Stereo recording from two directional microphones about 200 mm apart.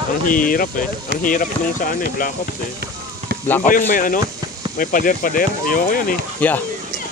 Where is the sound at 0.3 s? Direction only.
45° left (ahead or behind).